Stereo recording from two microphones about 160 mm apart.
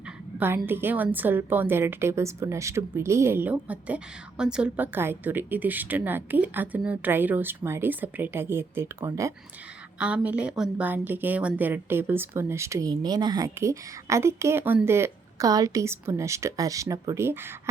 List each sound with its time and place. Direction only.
0.3 s a woman's voice: 10° right (ahead or behind)